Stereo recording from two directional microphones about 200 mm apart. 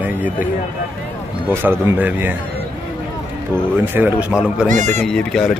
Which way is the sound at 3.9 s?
10° right (ahead or behind).